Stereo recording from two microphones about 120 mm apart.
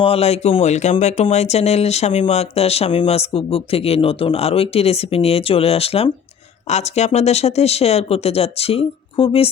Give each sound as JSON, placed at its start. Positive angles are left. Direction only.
{"t": 0.0, "sound": "speech", "side_deg": 55}
{"t": 6.7, "sound": "speech", "side_deg": 65}